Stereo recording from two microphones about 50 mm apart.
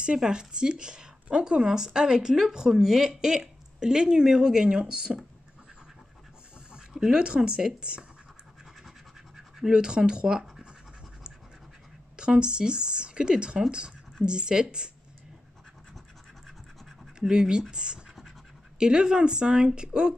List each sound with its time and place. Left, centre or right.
0.0 s speech: centre
6.9 s a sound: centre
7.2 s speech: centre
9.7 s speech: centre
12.2 s speech: centre
17.3 s speech: centre